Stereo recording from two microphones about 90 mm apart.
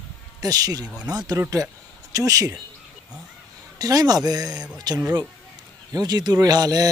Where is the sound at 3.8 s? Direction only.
45° right (ahead or behind).